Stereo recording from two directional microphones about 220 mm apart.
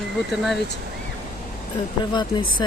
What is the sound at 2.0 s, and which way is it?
Speech, 20° left (ahead or behind).